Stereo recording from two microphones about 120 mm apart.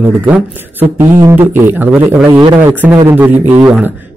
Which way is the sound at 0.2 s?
15° right (ahead or behind).